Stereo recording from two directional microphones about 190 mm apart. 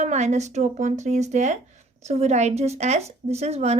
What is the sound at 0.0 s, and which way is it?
Speech, 35° right (ahead or behind).